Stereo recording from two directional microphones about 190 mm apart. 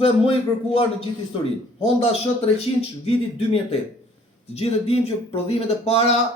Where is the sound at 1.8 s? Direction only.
30° left (ahead or behind).